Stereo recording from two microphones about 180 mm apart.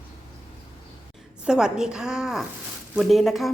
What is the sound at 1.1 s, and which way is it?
A woman's voice, 5° right (ahead or behind).